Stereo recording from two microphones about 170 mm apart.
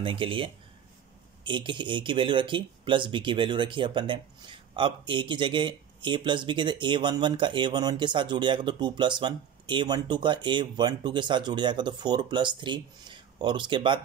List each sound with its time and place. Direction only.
0.0 s speech: 30° right (ahead or behind)